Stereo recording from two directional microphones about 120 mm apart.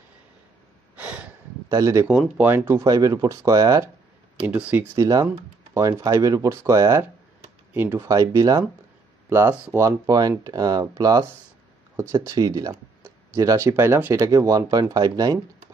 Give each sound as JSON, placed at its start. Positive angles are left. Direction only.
{"t": 0.9, "sound": "snort", "side_deg": -10}
{"t": 1.7, "sound": "speech", "side_deg": -25}
{"t": 2.0, "sound": "speech", "side_deg": -10}
{"t": 2.8, "sound": "speech", "side_deg": -30}
{"t": 4.5, "sound": "speech", "side_deg": -10}
{"t": 4.9, "sound": "speech", "side_deg": -25}
{"t": 8.1, "sound": "speech", "side_deg": -30}